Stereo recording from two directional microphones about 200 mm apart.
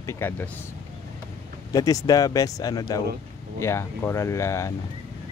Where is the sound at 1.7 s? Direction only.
15° left (ahead or behind).